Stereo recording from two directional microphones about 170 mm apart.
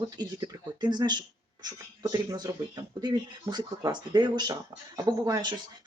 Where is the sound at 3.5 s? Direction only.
25° right (ahead or behind).